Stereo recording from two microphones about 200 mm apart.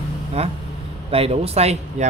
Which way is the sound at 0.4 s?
30° right (ahead or behind).